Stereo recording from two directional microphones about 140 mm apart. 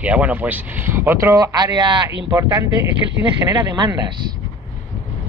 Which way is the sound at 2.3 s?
20° right (ahead or behind).